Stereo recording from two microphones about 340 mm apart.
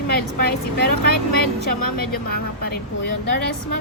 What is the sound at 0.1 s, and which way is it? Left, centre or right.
A woman's voice, left.